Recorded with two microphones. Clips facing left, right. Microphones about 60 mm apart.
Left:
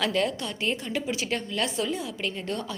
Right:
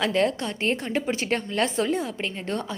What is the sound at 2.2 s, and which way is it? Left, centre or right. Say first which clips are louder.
Speech: right 2 dB; right.